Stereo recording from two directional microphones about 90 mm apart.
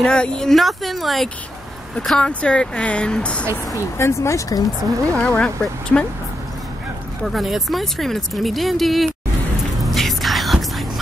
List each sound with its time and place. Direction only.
0.0 s speech: 10° left (ahead or behind)
3.7 s speech: 35° left (ahead or behind)
5.1 s speech: 15° left (ahead or behind)
7.3 s speech: centre (ahead or behind)
9.9 s music: centre (ahead or behind)